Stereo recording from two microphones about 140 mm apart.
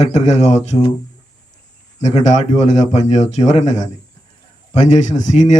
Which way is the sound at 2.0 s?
55° left (ahead or behind).